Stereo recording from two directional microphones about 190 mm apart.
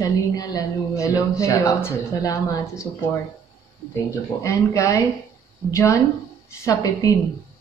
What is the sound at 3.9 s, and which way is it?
A woman's voice, 15° left (ahead or behind).